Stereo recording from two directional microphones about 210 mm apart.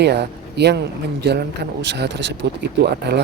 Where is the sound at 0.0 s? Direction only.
55° right (ahead or behind).